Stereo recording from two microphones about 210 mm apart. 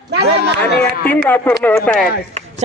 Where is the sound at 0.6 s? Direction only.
10° left (ahead or behind).